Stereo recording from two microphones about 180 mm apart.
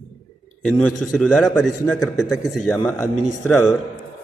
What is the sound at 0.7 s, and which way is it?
A man's voice, 5° left (ahead or behind).